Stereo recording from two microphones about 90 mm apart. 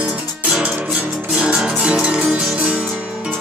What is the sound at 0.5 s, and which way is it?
Music, 10° right (ahead or behind).